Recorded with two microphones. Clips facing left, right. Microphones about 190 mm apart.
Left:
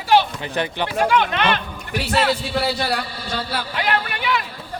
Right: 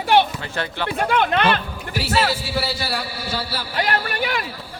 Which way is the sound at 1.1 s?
55° right (ahead or behind).